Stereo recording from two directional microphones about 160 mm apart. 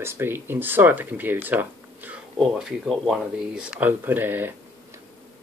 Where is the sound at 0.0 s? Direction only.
15° right (ahead or behind).